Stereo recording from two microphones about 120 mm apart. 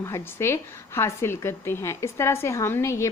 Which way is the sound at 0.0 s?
25° left (ahead or behind).